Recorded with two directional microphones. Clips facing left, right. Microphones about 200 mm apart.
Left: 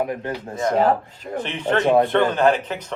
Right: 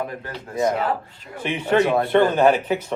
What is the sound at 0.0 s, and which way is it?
Speech, 20° left (ahead or behind).